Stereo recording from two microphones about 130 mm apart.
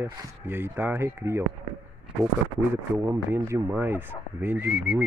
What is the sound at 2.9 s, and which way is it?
Speech, 15° right (ahead or behind).